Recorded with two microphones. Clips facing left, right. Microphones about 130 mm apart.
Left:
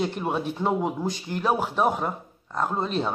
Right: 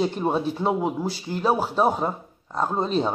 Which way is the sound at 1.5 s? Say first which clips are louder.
Right 2 dB; 10° right (ahead or behind).